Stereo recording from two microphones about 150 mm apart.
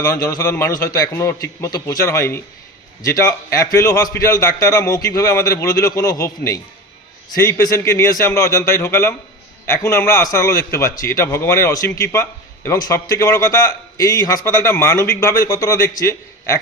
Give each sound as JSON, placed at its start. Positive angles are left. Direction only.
{"t": 0.0, "sound": "a man's voice", "side_deg": 20}